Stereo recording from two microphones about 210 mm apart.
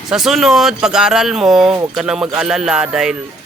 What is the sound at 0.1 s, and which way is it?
Speech, centre (ahead or behind).